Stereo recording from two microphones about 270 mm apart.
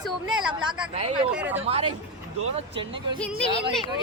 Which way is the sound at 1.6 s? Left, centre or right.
Right.